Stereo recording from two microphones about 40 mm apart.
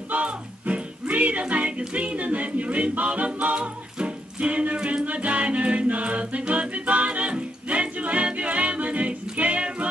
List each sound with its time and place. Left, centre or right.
0.1 s music: right